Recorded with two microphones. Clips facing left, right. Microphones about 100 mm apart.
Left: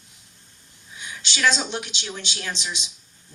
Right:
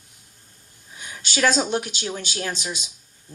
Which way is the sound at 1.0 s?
45° right (ahead or behind).